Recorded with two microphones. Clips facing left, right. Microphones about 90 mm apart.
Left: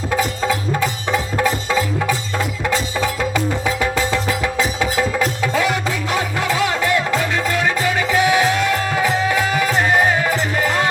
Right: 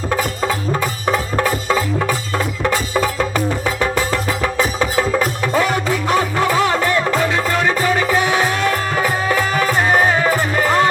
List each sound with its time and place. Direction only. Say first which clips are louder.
4.8 s music: right 2 dB; 45° right (ahead or behind)
9.5 s music: right 1 dB; 45° right (ahead or behind)